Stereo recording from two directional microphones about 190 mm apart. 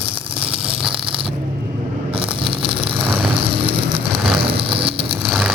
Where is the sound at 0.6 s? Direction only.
5° right (ahead or behind).